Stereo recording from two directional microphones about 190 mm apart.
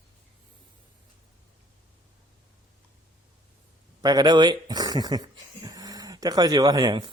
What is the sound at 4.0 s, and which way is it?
Speech, 20° right (ahead or behind).